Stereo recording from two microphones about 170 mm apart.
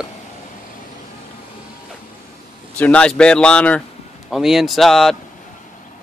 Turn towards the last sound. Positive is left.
turn(degrees=0)  # may be behind; listen again after turning